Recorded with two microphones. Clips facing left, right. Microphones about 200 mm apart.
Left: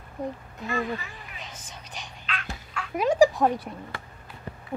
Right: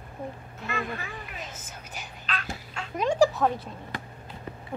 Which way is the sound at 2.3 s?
40° right (ahead or behind).